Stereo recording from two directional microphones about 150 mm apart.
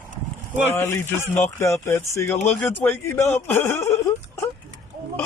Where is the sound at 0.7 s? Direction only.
15° left (ahead or behind).